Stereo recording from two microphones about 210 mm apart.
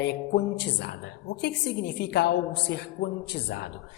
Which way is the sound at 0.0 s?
55° left (ahead or behind).